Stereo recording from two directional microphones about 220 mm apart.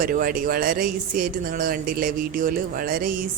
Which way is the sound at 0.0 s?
40° right (ahead or behind).